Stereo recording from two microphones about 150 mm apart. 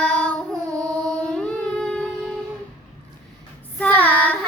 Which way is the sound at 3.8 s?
10° left (ahead or behind).